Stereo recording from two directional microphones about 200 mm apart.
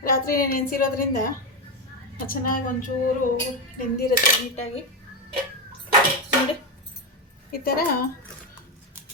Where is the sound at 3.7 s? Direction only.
45° left (ahead or behind).